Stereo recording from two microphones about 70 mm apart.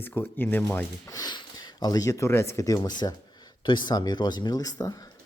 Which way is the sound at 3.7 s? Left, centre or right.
Left.